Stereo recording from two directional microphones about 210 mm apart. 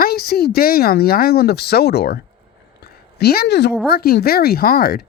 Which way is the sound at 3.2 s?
45° left (ahead or behind).